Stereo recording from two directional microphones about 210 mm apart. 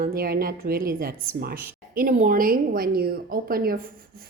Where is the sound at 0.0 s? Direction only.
45° right (ahead or behind).